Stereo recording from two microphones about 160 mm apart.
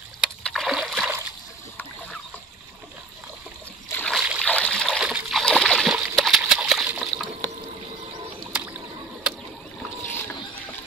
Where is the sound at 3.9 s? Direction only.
5° left (ahead or behind).